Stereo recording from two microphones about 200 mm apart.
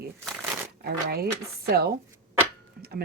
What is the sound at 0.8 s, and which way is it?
Speech, 50° right (ahead or behind).